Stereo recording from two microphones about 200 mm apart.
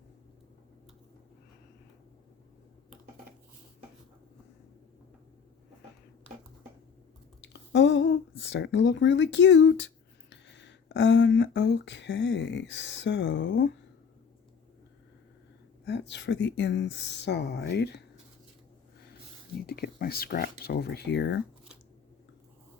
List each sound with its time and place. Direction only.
7.4 s speech: 65° left (ahead or behind)
15.9 s speech: 60° left (ahead or behind)
19.6 s speech: 50° left (ahead or behind)